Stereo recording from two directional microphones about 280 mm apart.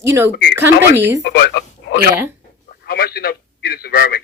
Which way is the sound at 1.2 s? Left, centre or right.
Left.